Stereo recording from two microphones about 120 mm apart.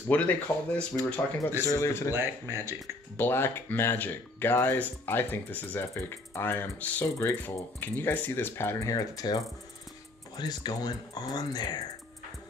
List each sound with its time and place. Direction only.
0.1 s speech: 10° left (ahead or behind)
1.7 s speech: 25° left (ahead or behind)
2.1 s speech: 25° right (ahead or behind)
3.2 s speech: 20° left (ahead or behind); by 11.8 s 35° left (ahead or behind)